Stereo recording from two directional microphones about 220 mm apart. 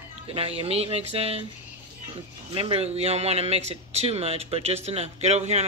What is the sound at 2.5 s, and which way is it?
Speech, 25° right (ahead or behind).